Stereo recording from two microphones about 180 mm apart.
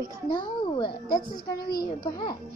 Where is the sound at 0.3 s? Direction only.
25° left (ahead or behind).